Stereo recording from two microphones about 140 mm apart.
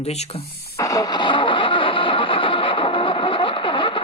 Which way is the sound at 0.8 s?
25° left (ahead or behind).